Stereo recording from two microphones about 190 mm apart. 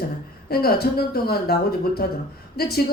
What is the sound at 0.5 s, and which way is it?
A man's voice, 55° left (ahead or behind).